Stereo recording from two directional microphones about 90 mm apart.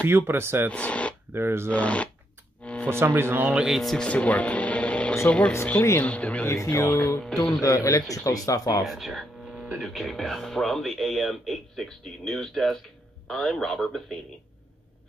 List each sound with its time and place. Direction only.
0.0 s speech: 25° right (ahead or behind)
0.7 s speech: 15° left (ahead or behind)
1.3 s speech: 25° right (ahead or behind)
1.7 s speech: 15° left (ahead or behind)
2.6 s music: 10° left (ahead or behind)
2.9 s speech: 30° right (ahead or behind)
3.4 s speech: 15° right (ahead or behind)
3.7 s speech: 5° left (ahead or behind)
6.4 s a man's voice: 30° left (ahead or behind)
6.9 s music: 20° left (ahead or behind)
7.2 s speech: 5° left (ahead or behind)
7.6 s a man's voice: 35° left (ahead or behind)
8.8 s speech: centre (ahead or behind)